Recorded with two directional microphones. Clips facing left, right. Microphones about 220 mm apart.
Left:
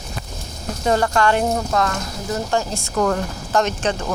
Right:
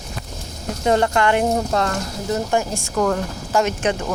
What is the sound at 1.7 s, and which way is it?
Speech, 30° right (ahead or behind).